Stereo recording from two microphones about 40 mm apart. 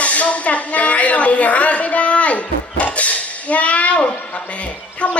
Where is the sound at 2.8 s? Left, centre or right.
Left.